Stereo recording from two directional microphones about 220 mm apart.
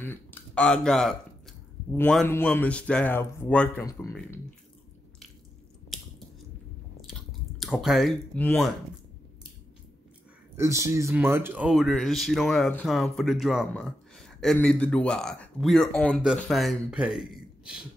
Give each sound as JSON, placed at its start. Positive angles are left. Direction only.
{"t": 0.0, "sound": "speech", "side_deg": 10}
{"t": 7.1, "sound": "speech", "side_deg": 0}
{"t": 10.5, "sound": "speech", "side_deg": -15}